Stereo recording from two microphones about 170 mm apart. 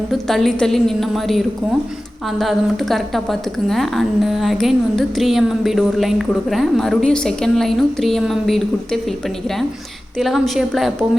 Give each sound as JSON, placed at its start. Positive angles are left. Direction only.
{"t": 0.1, "sound": "a woman's voice", "side_deg": 0}
{"t": 10.2, "sound": "a woman's voice", "side_deg": 0}